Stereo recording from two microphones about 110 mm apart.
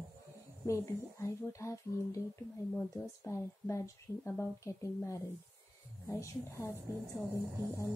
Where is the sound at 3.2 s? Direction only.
25° left (ahead or behind).